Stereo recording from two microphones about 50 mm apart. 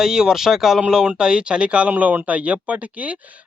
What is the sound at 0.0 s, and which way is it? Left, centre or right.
Speech, centre.